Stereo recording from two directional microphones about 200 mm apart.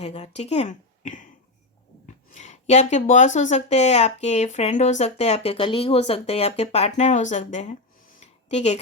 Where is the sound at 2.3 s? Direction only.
35° left (ahead or behind).